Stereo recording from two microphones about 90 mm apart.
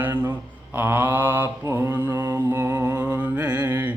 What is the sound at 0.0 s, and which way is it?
Mantra, 20° right (ahead or behind).